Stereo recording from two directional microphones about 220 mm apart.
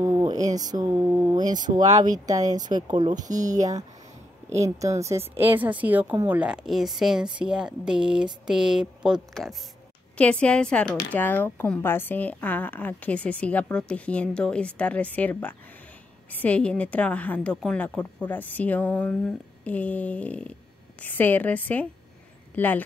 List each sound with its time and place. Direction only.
0.0 s a sound: 15° right (ahead or behind)
0.6 s speech: 15° right (ahead or behind)
1.9 s speech: 30° right (ahead or behind)
2.1 s speech: 15° right (ahead or behind)
4.5 s a woman's voice: 15° right (ahead or behind); by 22.8 s 10° left (ahead or behind)